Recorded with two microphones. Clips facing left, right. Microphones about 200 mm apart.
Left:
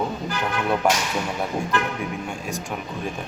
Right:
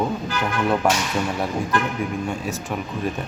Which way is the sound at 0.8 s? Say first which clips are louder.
Left 1 dB; centre (ahead or behind).